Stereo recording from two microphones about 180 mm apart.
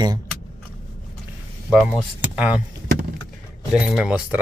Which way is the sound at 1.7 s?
5° right (ahead or behind).